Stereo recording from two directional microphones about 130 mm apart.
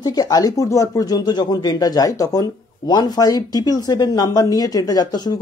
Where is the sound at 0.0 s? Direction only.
30° left (ahead or behind).